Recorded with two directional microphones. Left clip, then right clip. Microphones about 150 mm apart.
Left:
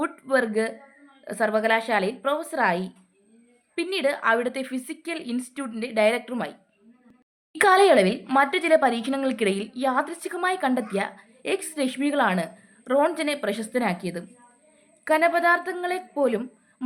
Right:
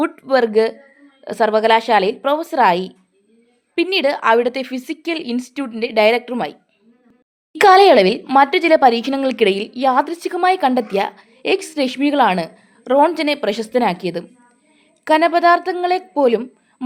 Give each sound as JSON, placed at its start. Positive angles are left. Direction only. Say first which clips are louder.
{"t": 0.0, "sound": "speech", "louder": "right 8 dB", "side_deg": -35}
{"t": 7.6, "sound": "speech", "louder": "right 8 dB", "side_deg": -35}